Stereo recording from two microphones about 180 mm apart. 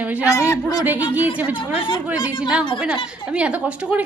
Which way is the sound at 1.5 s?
30° left (ahead or behind).